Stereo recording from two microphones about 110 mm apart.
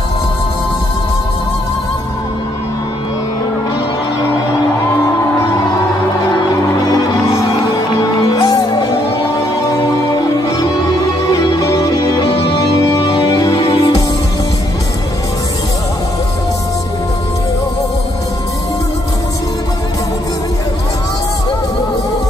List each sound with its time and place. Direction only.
6.8 s music: 35° left (ahead or behind)
11.3 s music: 35° left (ahead or behind)